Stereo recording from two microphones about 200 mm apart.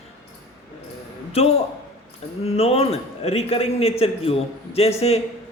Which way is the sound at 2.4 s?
30° left (ahead or behind).